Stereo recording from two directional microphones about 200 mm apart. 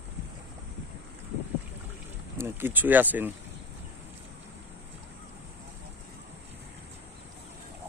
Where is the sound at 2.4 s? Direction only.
10° right (ahead or behind).